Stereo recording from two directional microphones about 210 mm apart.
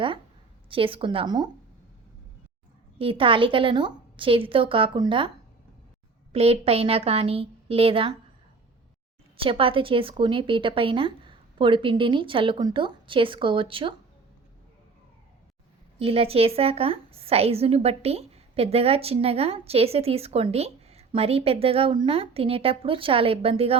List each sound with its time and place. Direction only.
0.7 s a woman's voice: 25° right (ahead or behind)
3.0 s a woman's voice: 25° right (ahead or behind)
6.3 s a woman's voice: 30° right (ahead or behind)
9.4 s a woman's voice: 25° right (ahead or behind)
16.0 s a woman's voice: 25° right (ahead or behind)